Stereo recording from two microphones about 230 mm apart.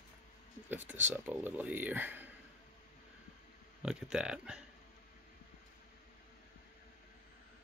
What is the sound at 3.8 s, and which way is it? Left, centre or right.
Speech, centre.